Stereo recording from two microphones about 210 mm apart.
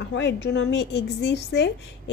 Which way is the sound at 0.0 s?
55° left (ahead or behind).